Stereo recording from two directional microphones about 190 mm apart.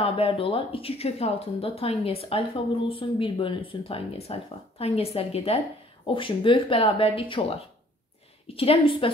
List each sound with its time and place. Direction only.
0.0 s speech: 30° left (ahead or behind)
8.5 s speech: 30° left (ahead or behind)